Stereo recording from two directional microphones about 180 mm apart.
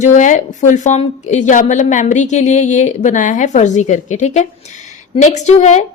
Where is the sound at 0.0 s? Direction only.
45° left (ahead or behind).